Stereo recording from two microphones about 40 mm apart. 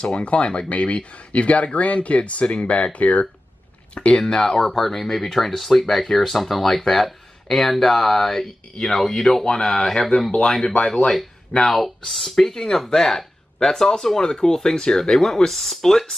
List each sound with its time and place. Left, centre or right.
0.0 s speech: left
4.2 s speech: centre
11.5 s speech: left
12.1 s speech: centre